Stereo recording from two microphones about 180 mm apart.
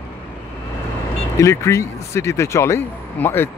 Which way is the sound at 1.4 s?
15° left (ahead or behind).